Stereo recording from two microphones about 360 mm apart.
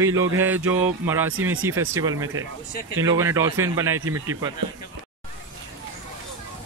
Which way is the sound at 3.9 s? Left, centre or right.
Right.